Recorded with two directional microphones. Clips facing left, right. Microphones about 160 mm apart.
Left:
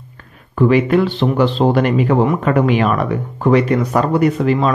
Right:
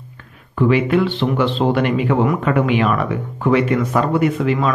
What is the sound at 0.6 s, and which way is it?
Speech, 40° left (ahead or behind).